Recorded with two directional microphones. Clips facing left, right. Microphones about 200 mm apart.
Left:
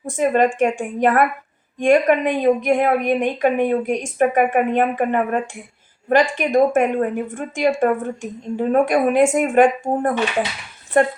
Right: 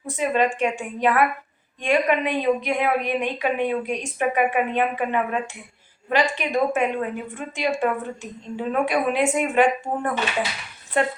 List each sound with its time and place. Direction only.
0.0 s a woman's voice: 50° left (ahead or behind)